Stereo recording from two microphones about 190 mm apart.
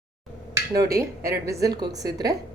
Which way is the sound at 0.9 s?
15° right (ahead or behind).